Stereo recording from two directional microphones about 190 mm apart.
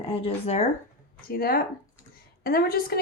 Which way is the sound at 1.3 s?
50° left (ahead or behind).